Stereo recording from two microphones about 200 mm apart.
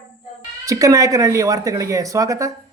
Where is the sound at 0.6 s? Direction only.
15° right (ahead or behind).